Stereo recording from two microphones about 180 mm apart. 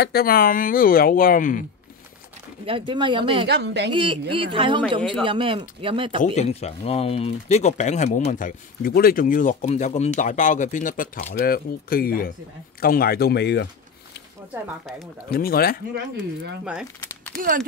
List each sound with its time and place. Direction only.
0.0 s speech: 60° left (ahead or behind)
2.6 s speech: 30° right (ahead or behind)
3.4 s a woman's voice: 70° right (ahead or behind)
3.9 s speech: 30° right (ahead or behind)
6.2 s speech: 40° left (ahead or behind); by 13.7 s 70° left (ahead or behind)
14.9 s speech: centre (ahead or behind)
15.2 s speech: 55° left (ahead or behind)